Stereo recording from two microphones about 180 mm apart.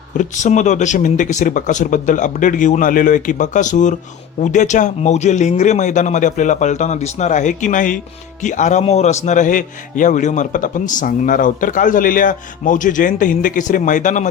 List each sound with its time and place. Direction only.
0.2 s a man's voice: 40° left (ahead or behind)